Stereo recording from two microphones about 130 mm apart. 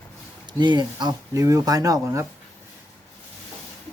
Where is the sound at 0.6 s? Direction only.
35° right (ahead or behind).